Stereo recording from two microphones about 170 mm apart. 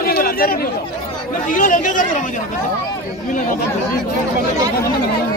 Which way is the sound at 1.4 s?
50° left (ahead or behind).